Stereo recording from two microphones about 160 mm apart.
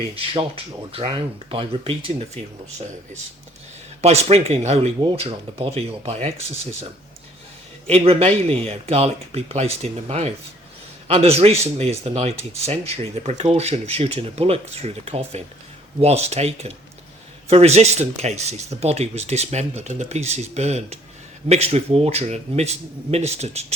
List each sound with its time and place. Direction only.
0.2 s speech: 35° right (ahead or behind)
4.0 s speech: 40° right (ahead or behind)
7.9 s speech: 40° right (ahead or behind)